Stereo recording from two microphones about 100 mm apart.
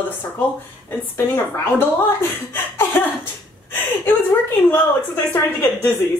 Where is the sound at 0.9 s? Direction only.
25° left (ahead or behind).